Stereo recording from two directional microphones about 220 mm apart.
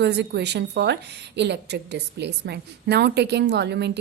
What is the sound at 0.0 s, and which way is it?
A woman's voice, 50° right (ahead or behind).